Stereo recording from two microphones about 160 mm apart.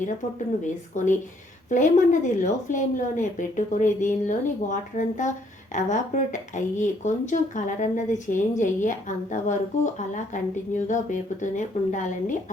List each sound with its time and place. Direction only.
0.6 s speech: 50° left (ahead or behind)